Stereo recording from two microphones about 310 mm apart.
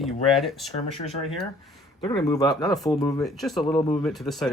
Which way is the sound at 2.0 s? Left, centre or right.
Centre.